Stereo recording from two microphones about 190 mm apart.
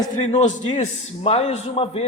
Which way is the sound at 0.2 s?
35° left (ahead or behind).